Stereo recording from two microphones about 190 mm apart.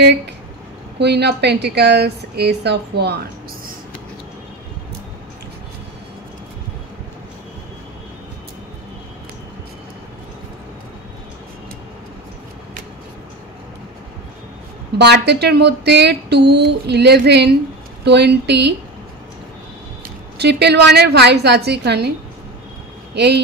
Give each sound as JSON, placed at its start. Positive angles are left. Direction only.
{"t": 0.9, "sound": "a woman's voice", "side_deg": -60}
{"t": 15.0, "sound": "a woman's voice", "side_deg": -60}
{"t": 20.3, "sound": "a woman's voice", "side_deg": -60}
{"t": 23.1, "sound": "a woman's voice", "side_deg": -60}